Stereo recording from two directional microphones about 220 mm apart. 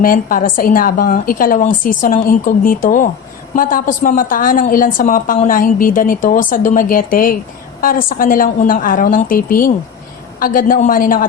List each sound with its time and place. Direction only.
0.0 s a woman's voice: 40° left (ahead or behind)